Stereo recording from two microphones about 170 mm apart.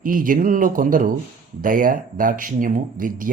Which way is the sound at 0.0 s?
55° right (ahead or behind).